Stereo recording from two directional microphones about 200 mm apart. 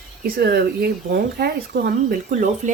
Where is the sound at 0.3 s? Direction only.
50° right (ahead or behind).